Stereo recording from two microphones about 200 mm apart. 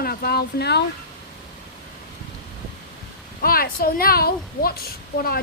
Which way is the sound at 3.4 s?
45° left (ahead or behind).